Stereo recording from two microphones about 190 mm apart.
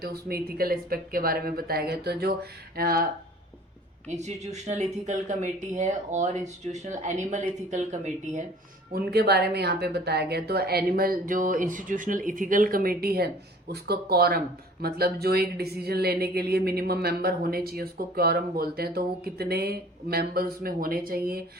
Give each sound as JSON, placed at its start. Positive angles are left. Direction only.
{"t": 0.0, "sound": "speech", "side_deg": -55}
{"t": 4.2, "sound": "speech", "side_deg": -35}
{"t": 8.9, "sound": "a woman's voice", "side_deg": -55}